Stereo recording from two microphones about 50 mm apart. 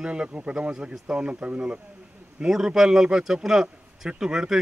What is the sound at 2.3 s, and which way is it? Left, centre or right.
A man's voice, centre.